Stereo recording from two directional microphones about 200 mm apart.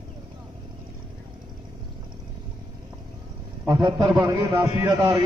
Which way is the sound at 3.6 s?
20° right (ahead or behind).